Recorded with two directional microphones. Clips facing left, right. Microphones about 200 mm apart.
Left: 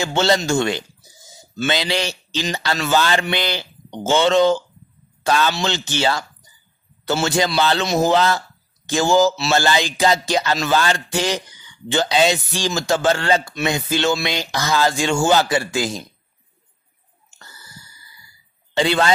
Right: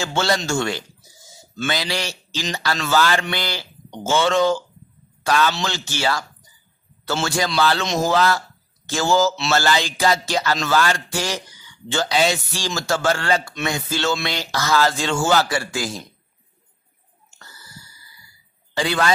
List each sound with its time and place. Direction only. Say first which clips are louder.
0.0 s speech: left 3 dB; 20° left (ahead or behind)
7.2 s speech: left 1 dB; 20° left (ahead or behind)
18.8 s speech: left 3 dB; 25° left (ahead or behind)